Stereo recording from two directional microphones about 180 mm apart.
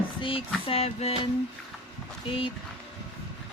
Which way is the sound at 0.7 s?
35° left (ahead or behind).